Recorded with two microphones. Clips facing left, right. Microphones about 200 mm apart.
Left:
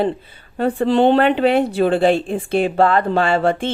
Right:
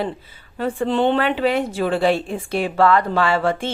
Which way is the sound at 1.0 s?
35° left (ahead or behind).